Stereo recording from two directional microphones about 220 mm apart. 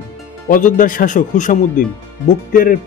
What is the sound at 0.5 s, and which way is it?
A man's voice, 40° left (ahead or behind).